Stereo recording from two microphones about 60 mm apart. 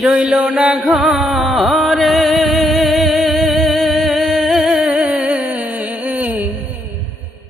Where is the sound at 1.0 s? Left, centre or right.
Centre; by 6.5 s right.